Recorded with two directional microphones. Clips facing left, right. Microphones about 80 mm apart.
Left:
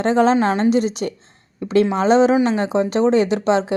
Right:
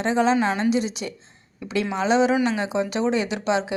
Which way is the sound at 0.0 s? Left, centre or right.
Left.